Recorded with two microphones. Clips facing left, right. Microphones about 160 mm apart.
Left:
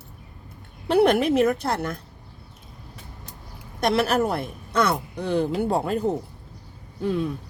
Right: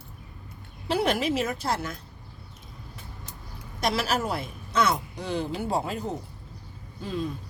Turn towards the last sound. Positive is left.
turn(degrees=60)  # may be behind; listen again after turning